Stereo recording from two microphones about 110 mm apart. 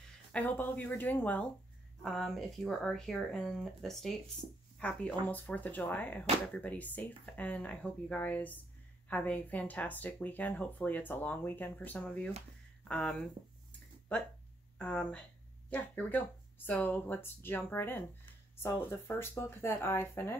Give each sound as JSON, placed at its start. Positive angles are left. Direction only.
{"t": 0.3, "sound": "speech", "side_deg": 15}
{"t": 2.0, "sound": "speech", "side_deg": 0}
{"t": 12.8, "sound": "a sound", "side_deg": 5}
{"t": 14.8, "sound": "speech", "side_deg": 15}